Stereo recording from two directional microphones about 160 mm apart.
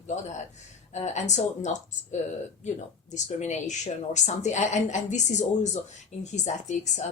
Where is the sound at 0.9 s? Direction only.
45° left (ahead or behind).